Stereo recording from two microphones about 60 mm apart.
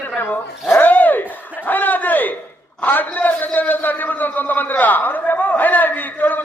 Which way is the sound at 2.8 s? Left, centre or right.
Left.